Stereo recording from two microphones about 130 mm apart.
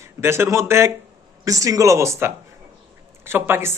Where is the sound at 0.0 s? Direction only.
20° right (ahead or behind).